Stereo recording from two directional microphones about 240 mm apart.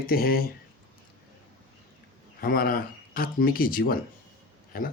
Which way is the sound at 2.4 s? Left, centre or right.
Left.